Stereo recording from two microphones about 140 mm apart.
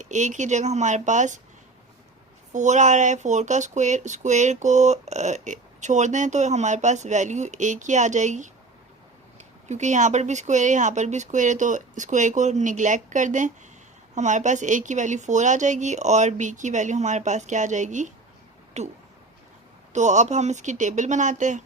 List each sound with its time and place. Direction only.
0.0 s speech: 60° right (ahead or behind)
2.5 s speech: 60° right (ahead or behind)
9.6 s speech: 55° right (ahead or behind)